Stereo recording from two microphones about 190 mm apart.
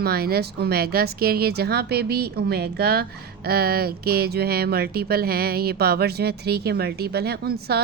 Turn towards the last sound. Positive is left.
turn(degrees=-55)  # may be behind; listen again after turning